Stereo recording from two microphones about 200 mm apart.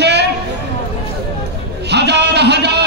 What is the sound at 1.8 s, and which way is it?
Speech, 55° right (ahead or behind).